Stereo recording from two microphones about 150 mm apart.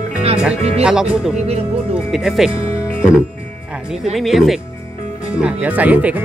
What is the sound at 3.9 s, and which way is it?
Speech, centre (ahead or behind).